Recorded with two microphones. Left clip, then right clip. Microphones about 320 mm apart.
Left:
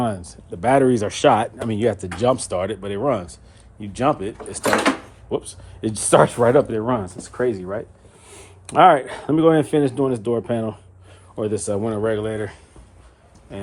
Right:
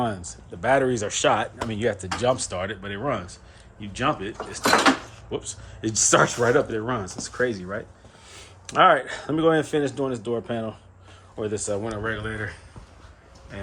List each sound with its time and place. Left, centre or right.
0.6 s speech: centre